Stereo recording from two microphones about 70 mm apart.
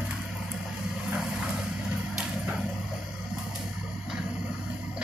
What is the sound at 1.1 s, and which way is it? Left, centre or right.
Vehicle, centre.